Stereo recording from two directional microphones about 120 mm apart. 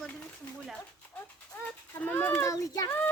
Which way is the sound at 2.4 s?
30° left (ahead or behind).